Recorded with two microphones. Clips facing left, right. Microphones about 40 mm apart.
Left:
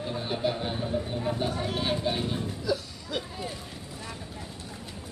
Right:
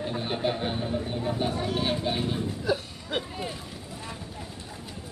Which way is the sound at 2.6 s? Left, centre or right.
Right.